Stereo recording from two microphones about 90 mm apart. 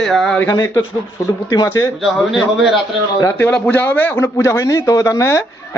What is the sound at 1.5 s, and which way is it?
Speech, 35° left (ahead or behind).